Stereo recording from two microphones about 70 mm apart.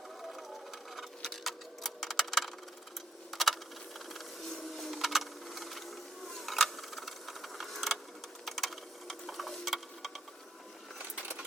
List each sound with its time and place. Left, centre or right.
0.9 s tick-tock: centre
3.3 s computer keyboard: centre
4.1 s a sound: centre
10.9 s sewing machine: centre